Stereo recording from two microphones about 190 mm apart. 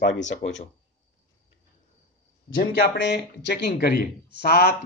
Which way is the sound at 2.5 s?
75° left (ahead or behind).